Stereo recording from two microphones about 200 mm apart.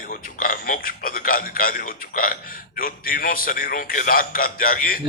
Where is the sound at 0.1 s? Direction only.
45° left (ahead or behind).